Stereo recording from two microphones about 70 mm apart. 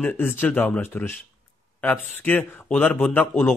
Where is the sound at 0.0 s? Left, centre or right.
Left.